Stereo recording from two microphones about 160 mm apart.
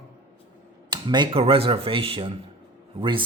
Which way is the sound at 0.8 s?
25° right (ahead or behind).